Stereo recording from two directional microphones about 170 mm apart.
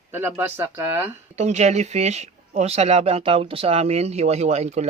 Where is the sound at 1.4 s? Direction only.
40° right (ahead or behind).